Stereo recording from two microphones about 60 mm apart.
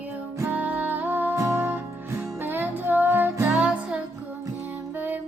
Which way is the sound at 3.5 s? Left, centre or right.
Right.